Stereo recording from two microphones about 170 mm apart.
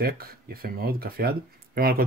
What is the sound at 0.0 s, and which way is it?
Speech, 65° right (ahead or behind).